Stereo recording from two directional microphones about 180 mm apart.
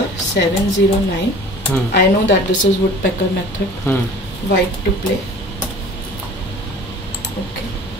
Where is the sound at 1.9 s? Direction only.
75° left (ahead or behind).